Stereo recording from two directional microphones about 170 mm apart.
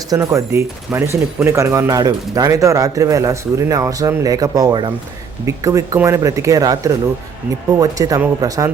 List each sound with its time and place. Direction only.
0.1 s speech: 15° right (ahead or behind)